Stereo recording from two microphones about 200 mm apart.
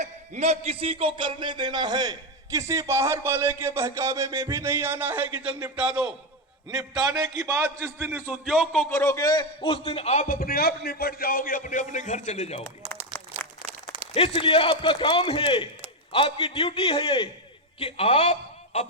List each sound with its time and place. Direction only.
0.0 s a man's voice: 35° right (ahead or behind); by 6.1 s 5° right (ahead or behind)
6.9 s a man's voice: 15° right (ahead or behind); by 8.9 s centre (ahead or behind)
8.9 s a man's voice: 15° left (ahead or behind); by 12.6 s 35° left (ahead or behind)
13.4 s a sound: 5° left (ahead or behind)
14.1 s a man's voice: 30° left (ahead or behind)